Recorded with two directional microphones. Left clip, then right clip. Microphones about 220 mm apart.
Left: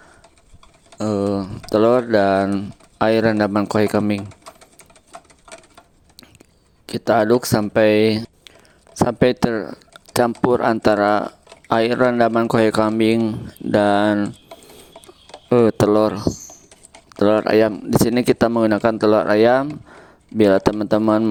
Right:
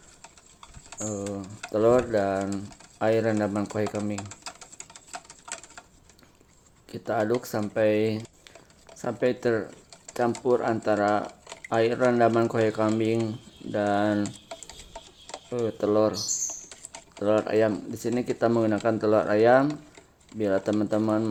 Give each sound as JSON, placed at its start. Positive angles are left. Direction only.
{"t": 0.9, "sound": "speech", "side_deg": 45}
{"t": 6.8, "sound": "speech", "side_deg": 45}
{"t": 15.4, "sound": "speech", "side_deg": 50}